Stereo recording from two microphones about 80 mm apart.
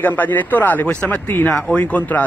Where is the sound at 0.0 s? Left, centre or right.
Left.